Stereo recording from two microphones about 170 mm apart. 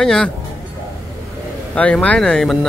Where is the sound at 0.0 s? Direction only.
5° left (ahead or behind).